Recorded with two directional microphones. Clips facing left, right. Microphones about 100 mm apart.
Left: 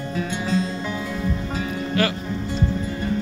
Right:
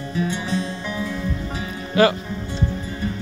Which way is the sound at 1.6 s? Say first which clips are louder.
Right 6 dB; 20° right (ahead or behind).